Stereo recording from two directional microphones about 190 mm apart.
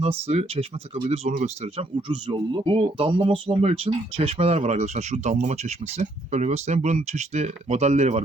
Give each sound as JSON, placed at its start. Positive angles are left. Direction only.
{"t": 0.0, "sound": "speech", "side_deg": -35}